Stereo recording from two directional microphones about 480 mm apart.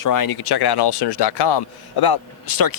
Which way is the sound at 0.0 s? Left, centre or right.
Left.